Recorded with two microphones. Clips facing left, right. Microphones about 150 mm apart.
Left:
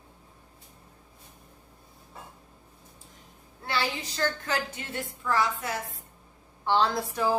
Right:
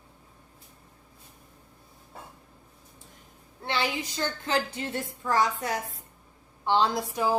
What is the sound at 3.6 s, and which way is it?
A woman's voice, 20° right (ahead or behind).